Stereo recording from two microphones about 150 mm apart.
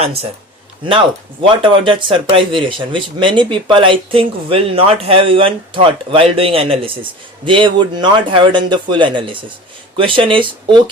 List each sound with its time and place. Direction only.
0.9 s speech: 35° right (ahead or behind)